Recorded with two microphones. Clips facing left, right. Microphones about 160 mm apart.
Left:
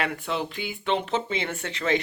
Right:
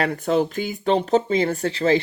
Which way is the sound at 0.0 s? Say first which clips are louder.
Right 8 dB; 40° right (ahead or behind).